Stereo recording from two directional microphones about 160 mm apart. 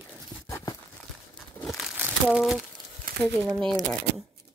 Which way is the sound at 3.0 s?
75° right (ahead or behind).